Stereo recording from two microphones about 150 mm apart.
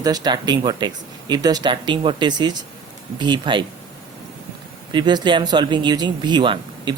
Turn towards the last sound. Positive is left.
turn(degrees=-30)  # may be behind; listen again after turning